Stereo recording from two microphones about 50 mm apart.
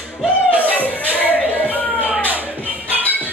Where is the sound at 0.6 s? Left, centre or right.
Left.